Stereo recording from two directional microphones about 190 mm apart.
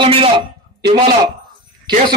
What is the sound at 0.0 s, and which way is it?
Speech, 30° right (ahead or behind).